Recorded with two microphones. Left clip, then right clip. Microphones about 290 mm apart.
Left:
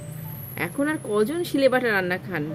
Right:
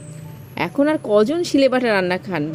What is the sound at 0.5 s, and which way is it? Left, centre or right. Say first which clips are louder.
Speech: right 7 dB; right.